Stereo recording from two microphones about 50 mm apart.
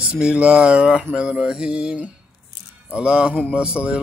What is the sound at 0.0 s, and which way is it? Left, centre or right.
A man's voice, right.